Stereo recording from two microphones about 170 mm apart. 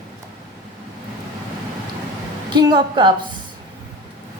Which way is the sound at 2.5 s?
25° right (ahead or behind).